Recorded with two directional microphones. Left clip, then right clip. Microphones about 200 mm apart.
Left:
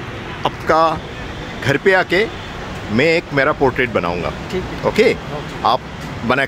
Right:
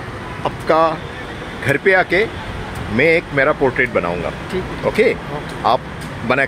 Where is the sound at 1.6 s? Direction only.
15° left (ahead or behind).